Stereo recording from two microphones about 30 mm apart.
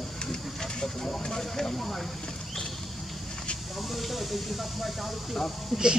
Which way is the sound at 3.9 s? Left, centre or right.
Centre.